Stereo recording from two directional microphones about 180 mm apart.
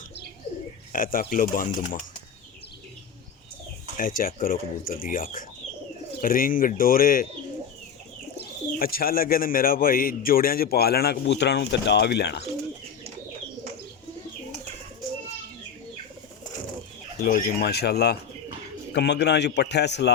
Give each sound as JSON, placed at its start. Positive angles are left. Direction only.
{"t": 0.9, "sound": "speech", "side_deg": 50}
{"t": 3.9, "sound": "speech", "side_deg": 50}
{"t": 8.4, "sound": "speech", "side_deg": 55}
{"t": 17.2, "sound": "a man's voice", "side_deg": 50}